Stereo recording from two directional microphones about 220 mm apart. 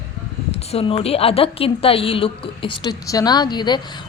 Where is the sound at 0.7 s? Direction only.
25° left (ahead or behind).